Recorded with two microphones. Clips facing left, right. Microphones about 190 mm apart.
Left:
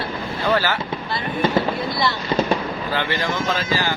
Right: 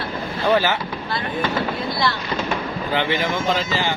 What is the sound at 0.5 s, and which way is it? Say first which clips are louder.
Speech: right 2 dB; 20° right (ahead or behind).